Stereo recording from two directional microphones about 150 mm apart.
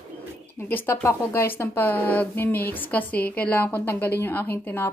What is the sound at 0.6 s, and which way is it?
A woman's voice, 15° left (ahead or behind).